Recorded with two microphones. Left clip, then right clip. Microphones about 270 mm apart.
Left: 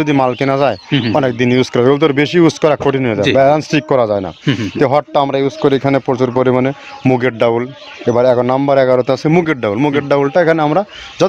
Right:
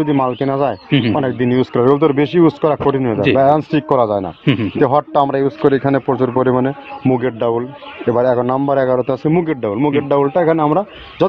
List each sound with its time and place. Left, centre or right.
0.0 s a man's voice: left